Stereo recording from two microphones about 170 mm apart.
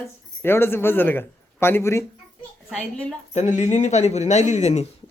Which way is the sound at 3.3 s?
45° left (ahead or behind).